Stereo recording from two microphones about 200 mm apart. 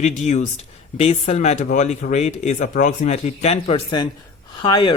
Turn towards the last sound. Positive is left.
turn(degrees=20)  # may be behind; listen again after turning